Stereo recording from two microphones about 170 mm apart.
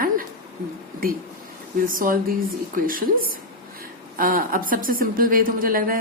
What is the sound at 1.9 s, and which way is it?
A woman's voice, 55° right (ahead or behind).